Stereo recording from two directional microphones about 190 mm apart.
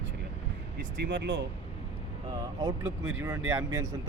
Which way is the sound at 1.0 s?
65° right (ahead or behind).